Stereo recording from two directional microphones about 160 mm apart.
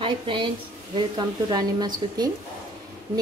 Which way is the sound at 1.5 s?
25° right (ahead or behind).